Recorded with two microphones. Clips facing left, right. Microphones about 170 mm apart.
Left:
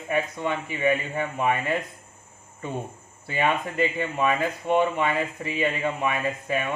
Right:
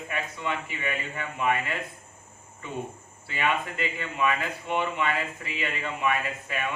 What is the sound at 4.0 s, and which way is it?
A man's voice, 40° left (ahead or behind).